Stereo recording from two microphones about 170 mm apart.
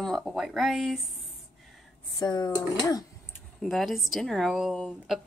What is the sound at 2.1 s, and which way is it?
Speech, 25° left (ahead or behind).